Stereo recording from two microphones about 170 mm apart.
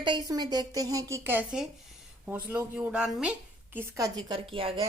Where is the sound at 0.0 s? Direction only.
25° right (ahead or behind).